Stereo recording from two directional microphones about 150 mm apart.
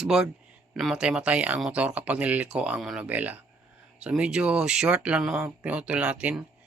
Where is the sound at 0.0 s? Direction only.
5° right (ahead or behind).